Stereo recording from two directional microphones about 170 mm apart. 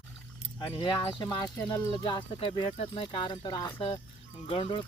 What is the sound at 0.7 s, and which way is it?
Speech, 30° left (ahead or behind).